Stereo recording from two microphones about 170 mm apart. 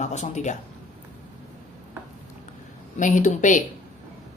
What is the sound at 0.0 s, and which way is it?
Speech, 45° left (ahead or behind).